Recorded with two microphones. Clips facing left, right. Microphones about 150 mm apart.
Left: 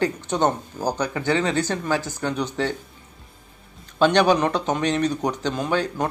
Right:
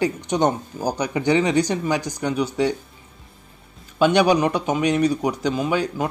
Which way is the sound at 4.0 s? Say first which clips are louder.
Right 1 dB; 10° right (ahead or behind).